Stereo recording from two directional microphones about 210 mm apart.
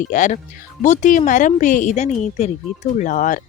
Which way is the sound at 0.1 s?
35° left (ahead or behind).